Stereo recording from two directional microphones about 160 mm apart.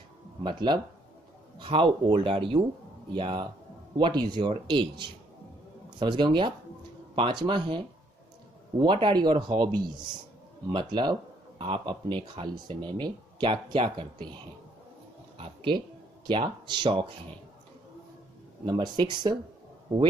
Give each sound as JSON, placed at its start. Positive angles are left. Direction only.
{"t": 0.4, "sound": "speech", "side_deg": -30}
{"t": 5.9, "sound": "speech", "side_deg": -30}
{"t": 10.7, "sound": "speech", "side_deg": -30}
{"t": 15.3, "sound": "speech", "side_deg": -35}
{"t": 18.7, "sound": "speech", "side_deg": -25}